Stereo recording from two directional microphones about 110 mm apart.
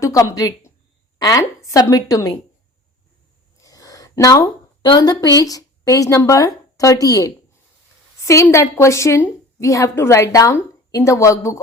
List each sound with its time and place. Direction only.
0.0 s a woman's voice: 30° left (ahead or behind)
3.6 s a woman's voice: 35° left (ahead or behind)